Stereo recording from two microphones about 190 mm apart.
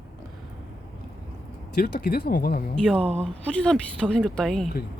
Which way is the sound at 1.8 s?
55° left (ahead or behind).